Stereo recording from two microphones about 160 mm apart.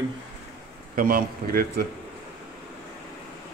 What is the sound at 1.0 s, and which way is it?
Speech, 65° right (ahead or behind).